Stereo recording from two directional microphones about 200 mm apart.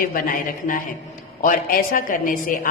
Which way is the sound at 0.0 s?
45° left (ahead or behind).